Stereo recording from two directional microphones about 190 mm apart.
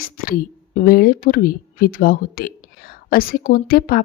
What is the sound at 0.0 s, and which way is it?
Speech, 50° left (ahead or behind).